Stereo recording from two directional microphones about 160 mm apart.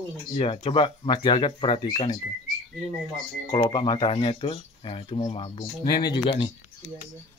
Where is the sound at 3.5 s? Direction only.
25° left (ahead or behind).